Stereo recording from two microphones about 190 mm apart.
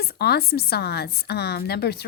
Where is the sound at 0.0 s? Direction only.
55° left (ahead or behind).